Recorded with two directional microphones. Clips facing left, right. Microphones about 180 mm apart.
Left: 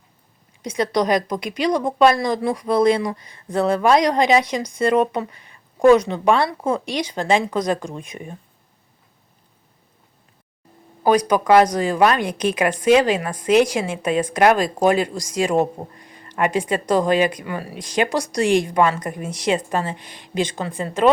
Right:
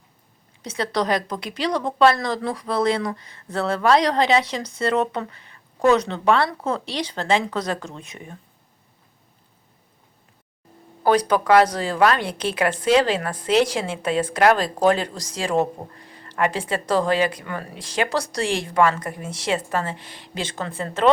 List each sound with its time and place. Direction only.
0.6 s a woman's voice: 15° left (ahead or behind)
11.0 s a woman's voice: 15° left (ahead or behind)